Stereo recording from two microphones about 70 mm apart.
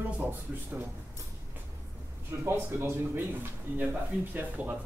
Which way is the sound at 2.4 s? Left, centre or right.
Right.